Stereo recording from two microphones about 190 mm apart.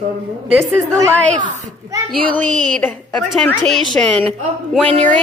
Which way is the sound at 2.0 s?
5° left (ahead or behind).